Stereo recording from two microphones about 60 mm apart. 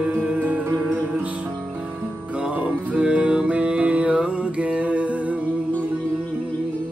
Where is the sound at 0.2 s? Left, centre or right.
Centre.